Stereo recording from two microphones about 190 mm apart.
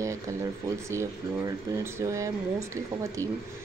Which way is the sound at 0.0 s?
15° right (ahead or behind).